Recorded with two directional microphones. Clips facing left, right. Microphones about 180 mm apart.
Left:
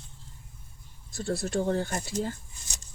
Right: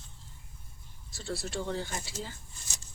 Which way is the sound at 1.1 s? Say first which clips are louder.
Left 7 dB; 50° left (ahead or behind).